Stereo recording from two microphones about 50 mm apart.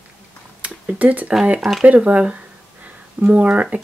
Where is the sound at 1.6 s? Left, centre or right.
Centre.